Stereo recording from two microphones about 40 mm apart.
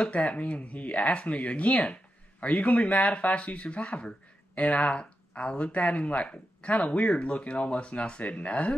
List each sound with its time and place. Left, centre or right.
0.0 s speech: left